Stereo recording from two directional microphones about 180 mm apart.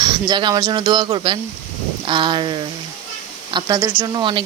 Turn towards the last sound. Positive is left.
turn(degrees=-25)  # may be behind; listen again after turning